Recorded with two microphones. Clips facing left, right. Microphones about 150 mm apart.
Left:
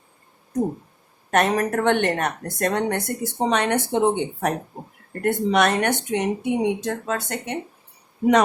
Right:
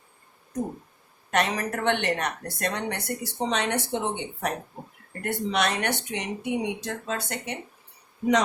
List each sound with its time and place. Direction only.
1.3 s a woman's voice: 50° left (ahead or behind)